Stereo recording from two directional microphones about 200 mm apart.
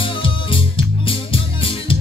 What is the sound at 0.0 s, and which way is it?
Music, 25° left (ahead or behind).